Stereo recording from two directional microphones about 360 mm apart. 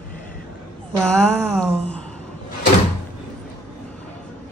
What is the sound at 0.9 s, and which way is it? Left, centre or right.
A woman's voice, centre.